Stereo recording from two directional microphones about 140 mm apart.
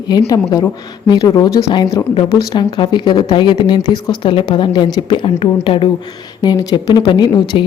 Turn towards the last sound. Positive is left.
turn(degrees=35)  # may be behind; listen again after turning